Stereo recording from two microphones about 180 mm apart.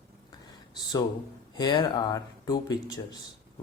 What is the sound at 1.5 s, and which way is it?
Speech, 25° left (ahead or behind).